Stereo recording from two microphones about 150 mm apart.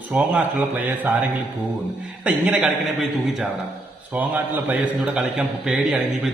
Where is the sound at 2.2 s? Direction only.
10° right (ahead or behind).